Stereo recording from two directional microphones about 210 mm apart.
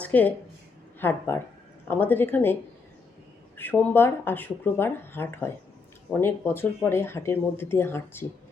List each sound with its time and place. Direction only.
0.0 s a woman's voice: 10° left (ahead or behind)
3.6 s speech: 10° left (ahead or behind)